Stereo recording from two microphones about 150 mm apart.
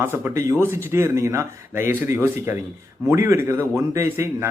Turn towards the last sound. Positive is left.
turn(degrees=-20)  # may be behind; listen again after turning